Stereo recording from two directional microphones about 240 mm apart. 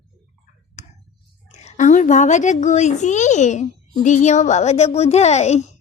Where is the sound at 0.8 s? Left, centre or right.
Left.